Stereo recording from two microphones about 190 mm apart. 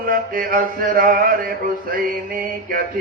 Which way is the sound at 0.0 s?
50° right (ahead or behind).